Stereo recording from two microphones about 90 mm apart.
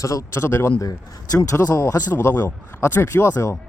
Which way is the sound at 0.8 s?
45° left (ahead or behind).